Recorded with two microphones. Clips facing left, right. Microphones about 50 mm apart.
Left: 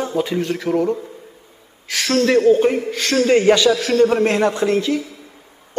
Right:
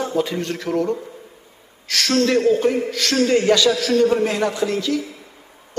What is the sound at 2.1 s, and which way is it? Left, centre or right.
A man's voice, left.